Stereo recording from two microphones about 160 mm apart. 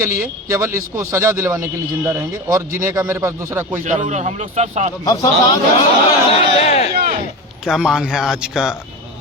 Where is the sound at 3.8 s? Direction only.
50° right (ahead or behind).